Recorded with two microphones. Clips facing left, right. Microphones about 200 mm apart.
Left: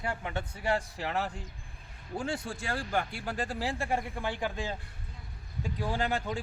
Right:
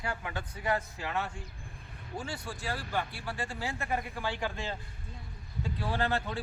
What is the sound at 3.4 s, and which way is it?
A man's voice, 35° left (ahead or behind).